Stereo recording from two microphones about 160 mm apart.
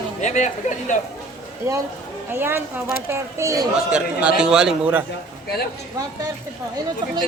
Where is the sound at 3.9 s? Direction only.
5° right (ahead or behind).